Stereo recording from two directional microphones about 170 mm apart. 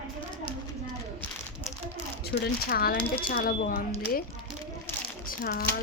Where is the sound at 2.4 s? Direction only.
65° left (ahead or behind).